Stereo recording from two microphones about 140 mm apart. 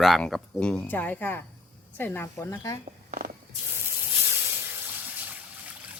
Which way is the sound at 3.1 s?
65° right (ahead or behind).